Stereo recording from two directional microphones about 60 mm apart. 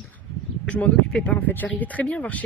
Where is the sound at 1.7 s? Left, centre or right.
Left.